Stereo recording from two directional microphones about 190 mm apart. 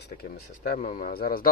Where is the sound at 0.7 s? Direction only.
40° left (ahead or behind).